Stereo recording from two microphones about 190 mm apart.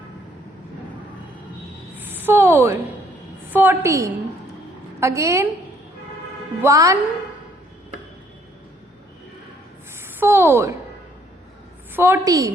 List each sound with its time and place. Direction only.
2.0 s a sound: 10° right (ahead or behind)
3.5 s a woman's voice: 10° right (ahead or behind)
6.6 s a woman's voice: 15° right (ahead or behind)
10.0 s a woman's voice: 10° right (ahead or behind)
11.9 s a woman's voice: 10° right (ahead or behind)